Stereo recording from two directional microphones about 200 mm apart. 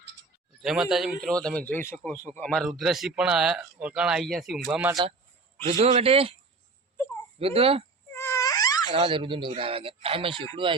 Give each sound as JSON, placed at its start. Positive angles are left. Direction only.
{"t": 0.6, "sound": "a man's voice", "side_deg": 0}
{"t": 5.8, "sound": "speech", "side_deg": -30}
{"t": 7.3, "sound": "speech", "side_deg": -30}
{"t": 8.1, "sound": "mosquito", "side_deg": 10}
{"t": 8.9, "sound": "speech", "side_deg": -25}